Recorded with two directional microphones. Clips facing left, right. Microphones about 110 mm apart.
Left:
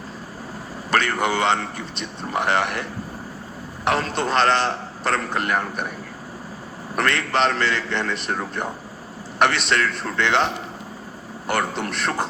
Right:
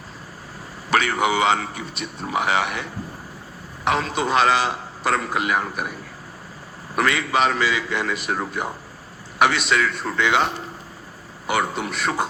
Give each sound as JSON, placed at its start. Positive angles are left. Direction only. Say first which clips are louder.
{"t": 0.9, "sound": "a man's voice", "louder": "right 1 dB", "side_deg": -5}
{"t": 6.9, "sound": "a man's voice", "louder": "right 1 dB", "side_deg": -5}